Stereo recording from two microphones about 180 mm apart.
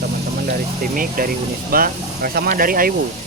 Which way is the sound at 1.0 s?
50° right (ahead or behind).